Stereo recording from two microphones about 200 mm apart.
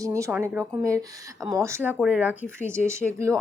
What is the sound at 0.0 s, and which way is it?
Speech, 15° right (ahead or behind).